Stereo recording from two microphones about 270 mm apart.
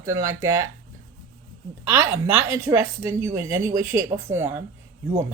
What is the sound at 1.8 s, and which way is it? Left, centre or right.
A woman's voice, centre.